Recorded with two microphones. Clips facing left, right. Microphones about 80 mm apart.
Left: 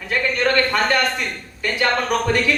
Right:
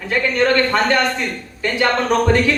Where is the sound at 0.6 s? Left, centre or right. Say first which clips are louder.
Right 2 dB; right.